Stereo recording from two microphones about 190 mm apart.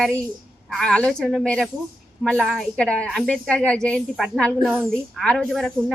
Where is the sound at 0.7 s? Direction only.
5° left (ahead or behind).